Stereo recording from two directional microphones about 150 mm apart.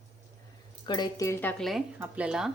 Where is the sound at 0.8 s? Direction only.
30° left (ahead or behind).